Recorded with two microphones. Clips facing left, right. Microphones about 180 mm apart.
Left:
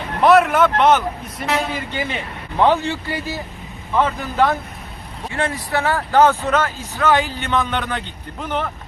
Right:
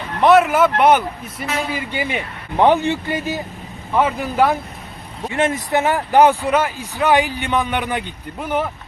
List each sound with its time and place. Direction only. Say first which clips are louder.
0.2 s speech: right 1 dB; centre (ahead or behind)